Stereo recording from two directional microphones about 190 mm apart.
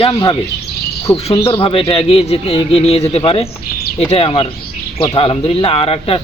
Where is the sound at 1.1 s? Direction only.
30° left (ahead or behind).